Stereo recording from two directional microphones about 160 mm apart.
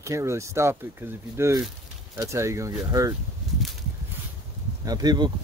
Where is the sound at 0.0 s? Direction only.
20° right (ahead or behind).